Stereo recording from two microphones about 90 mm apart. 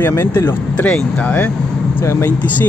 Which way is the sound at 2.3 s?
15° left (ahead or behind).